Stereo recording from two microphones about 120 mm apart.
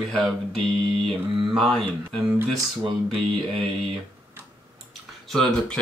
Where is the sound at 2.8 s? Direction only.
50° right (ahead or behind).